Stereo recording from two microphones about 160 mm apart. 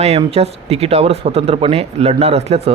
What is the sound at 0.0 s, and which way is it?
Speech, 40° right (ahead or behind).